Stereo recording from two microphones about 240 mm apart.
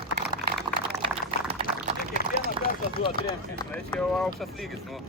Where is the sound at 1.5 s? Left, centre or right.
Right.